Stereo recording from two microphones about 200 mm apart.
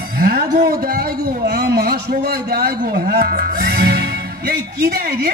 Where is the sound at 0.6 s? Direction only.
45° right (ahead or behind).